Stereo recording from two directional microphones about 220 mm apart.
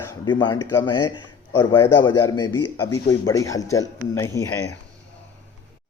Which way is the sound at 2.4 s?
15° left (ahead or behind).